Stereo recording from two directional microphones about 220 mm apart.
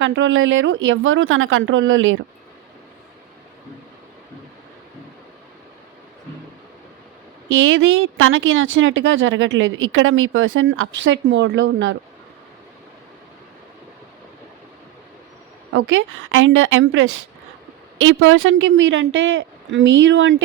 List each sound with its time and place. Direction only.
0.0 s speech: 55° right (ahead or behind)
7.4 s speech: 60° right (ahead or behind)
15.7 s speech: 60° right (ahead or behind)